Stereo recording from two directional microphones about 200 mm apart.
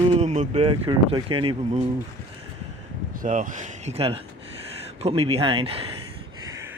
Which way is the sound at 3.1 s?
40° right (ahead or behind).